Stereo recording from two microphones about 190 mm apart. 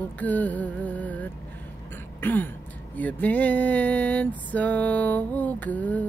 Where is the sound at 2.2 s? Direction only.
10° left (ahead or behind).